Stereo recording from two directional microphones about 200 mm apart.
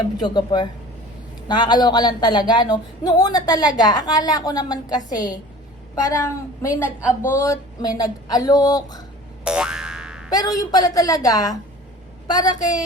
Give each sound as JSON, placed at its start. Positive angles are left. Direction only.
{"t": 0.2, "sound": "a woman's voice", "side_deg": 20}
{"t": 9.4, "sound": "boing", "side_deg": -5}
{"t": 10.2, "sound": "a woman's voice", "side_deg": 20}